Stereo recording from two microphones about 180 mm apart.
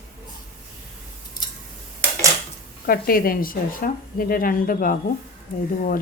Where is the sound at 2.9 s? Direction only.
55° left (ahead or behind).